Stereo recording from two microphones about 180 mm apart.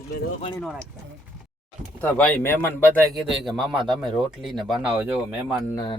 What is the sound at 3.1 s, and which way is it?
Speech, centre (ahead or behind).